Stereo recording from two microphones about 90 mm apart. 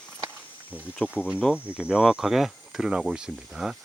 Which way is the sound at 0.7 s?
20° left (ahead or behind).